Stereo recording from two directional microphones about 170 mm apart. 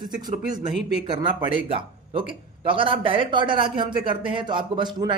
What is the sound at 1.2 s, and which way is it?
Speech, 30° right (ahead or behind).